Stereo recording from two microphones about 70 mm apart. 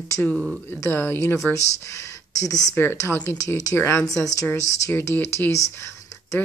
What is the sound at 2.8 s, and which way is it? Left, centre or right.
Speech, left.